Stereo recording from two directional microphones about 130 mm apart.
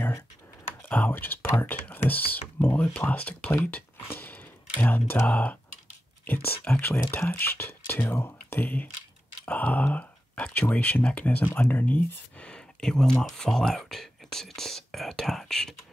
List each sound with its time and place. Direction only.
0.8 s speech: 15° left (ahead or behind)